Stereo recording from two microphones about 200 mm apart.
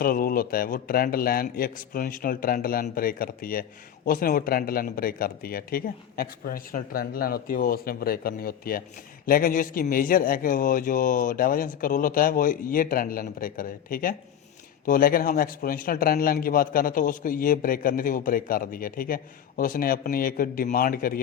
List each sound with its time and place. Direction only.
0.0 s a man's voice: 45° left (ahead or behind)